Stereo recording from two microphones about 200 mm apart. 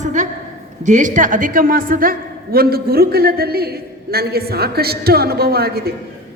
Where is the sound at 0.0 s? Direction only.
40° right (ahead or behind).